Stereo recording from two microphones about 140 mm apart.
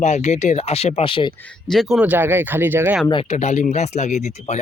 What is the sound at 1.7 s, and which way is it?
Speech, centre (ahead or behind).